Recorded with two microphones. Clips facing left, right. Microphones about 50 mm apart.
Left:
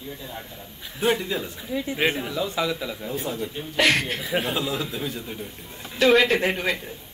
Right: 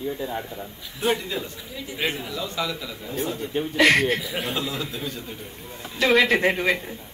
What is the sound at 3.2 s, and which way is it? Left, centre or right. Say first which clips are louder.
Speech: right 4 dB; centre.